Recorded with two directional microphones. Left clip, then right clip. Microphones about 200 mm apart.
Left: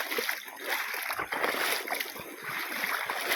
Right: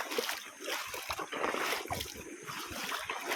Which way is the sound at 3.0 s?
30° left (ahead or behind).